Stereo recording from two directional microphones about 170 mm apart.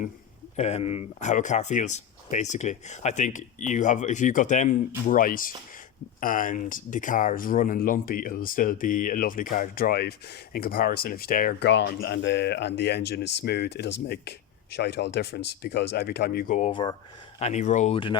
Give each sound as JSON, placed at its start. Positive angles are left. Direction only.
{"t": 0.5, "sound": "speech", "side_deg": 40}
{"t": 16.8, "sound": "speech", "side_deg": 25}
{"t": 17.4, "sound": "speech", "side_deg": 45}